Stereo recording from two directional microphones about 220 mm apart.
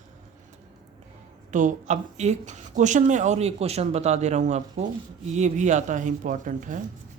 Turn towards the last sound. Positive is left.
turn(degrees=-35)  # may be behind; listen again after turning